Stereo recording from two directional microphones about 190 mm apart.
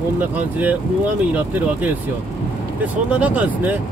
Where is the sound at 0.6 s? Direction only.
10° right (ahead or behind).